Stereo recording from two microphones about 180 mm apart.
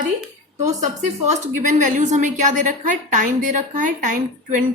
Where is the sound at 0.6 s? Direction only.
40° right (ahead or behind).